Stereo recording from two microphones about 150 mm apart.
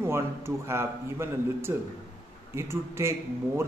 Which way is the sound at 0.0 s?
15° right (ahead or behind).